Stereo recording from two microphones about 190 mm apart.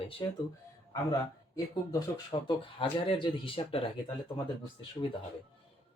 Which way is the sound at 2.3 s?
25° left (ahead or behind).